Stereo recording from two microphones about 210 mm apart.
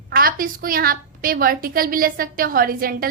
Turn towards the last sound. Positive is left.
turn(degrees=-45)  # may be behind; listen again after turning